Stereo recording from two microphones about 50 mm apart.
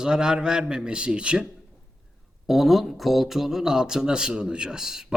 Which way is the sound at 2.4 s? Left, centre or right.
Centre.